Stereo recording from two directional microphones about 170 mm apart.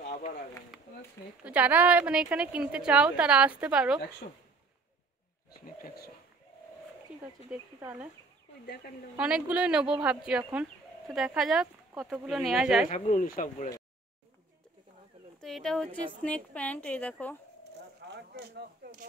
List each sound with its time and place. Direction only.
1.4 s a woman's voice: 10° right (ahead or behind)
5.8 s pigeon: 65° left (ahead or behind)
7.8 s a woman's voice: 10° right (ahead or behind)
9.2 s speech: 5° right (ahead or behind)
13.1 s speech: 50° left (ahead or behind)
15.4 s a woman's voice: centre (ahead or behind)
18.0 s a sound: 75° right (ahead or behind); by 19.0 s 60° right (ahead or behind)